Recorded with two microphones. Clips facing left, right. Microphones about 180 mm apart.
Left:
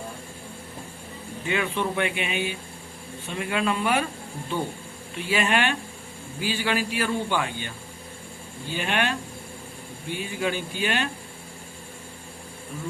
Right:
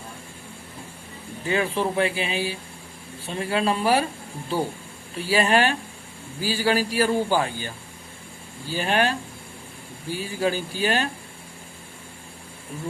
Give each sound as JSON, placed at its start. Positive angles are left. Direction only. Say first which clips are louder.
{"t": 1.5, "sound": "a man's voice", "louder": "right 3 dB", "side_deg": -35}
{"t": 5.1, "sound": "a man's voice", "louder": "right 4 dB", "side_deg": -35}